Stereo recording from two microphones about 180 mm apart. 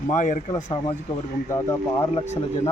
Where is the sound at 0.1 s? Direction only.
45° left (ahead or behind).